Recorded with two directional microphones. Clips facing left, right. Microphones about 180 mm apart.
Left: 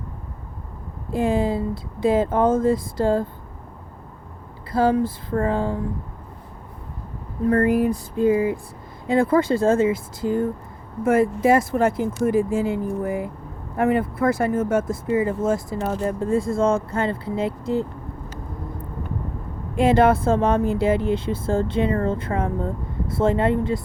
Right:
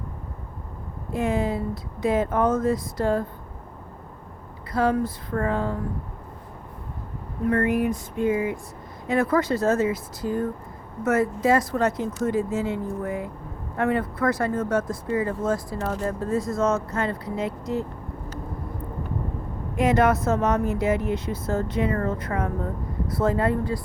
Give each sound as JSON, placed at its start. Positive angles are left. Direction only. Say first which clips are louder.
{"t": 1.1, "sound": "speech", "louder": "left 3 dB", "side_deg": 30}
{"t": 4.7, "sound": "speech", "louder": "left 3 dB", "side_deg": 30}
{"t": 7.4, "sound": "speech", "louder": "left 4 dB", "side_deg": 35}
{"t": 13.7, "sound": "speech", "louder": "left 4 dB", "side_deg": 25}
{"t": 19.7, "sound": "speech", "louder": "left 4 dB", "side_deg": 30}